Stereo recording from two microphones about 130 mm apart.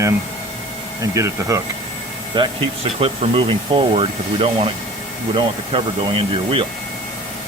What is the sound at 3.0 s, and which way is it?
Speech, 45° right (ahead or behind).